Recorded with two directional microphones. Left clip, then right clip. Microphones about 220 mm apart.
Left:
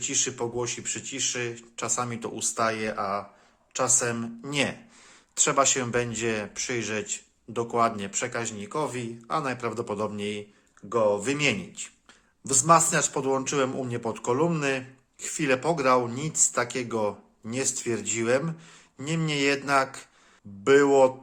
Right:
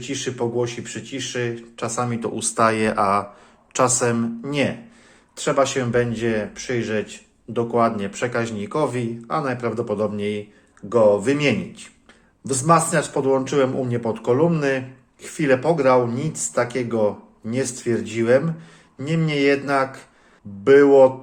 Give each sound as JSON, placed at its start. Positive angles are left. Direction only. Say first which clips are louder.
{"t": 0.0, "sound": "speech", "louder": "right 4 dB", "side_deg": 20}
{"t": 3.9, "sound": "speech", "louder": "right 6 dB", "side_deg": 0}
{"t": 4.4, "sound": "speech", "louder": "right 3 dB", "side_deg": 15}